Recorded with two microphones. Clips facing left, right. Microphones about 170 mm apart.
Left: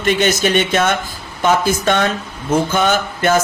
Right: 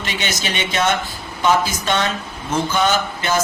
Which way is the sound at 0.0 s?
50° left (ahead or behind).